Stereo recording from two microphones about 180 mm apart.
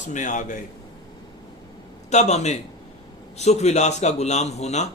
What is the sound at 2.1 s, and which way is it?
A man's voice, 40° left (ahead or behind).